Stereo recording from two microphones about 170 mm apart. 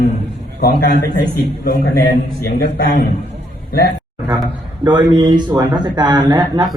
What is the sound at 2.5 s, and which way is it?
Speech, 80° left.